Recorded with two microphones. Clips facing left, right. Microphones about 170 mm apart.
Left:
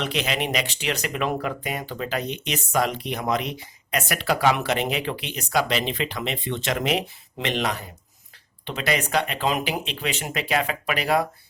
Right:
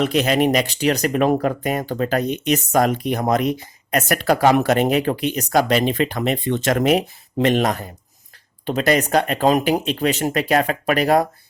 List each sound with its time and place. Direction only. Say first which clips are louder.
0.0 s speech: right 9 dB; 45° right (ahead or behind)